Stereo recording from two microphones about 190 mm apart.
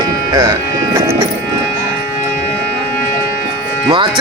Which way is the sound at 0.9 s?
15° right (ahead or behind).